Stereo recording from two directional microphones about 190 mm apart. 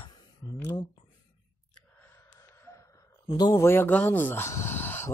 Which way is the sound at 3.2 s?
20° left (ahead or behind).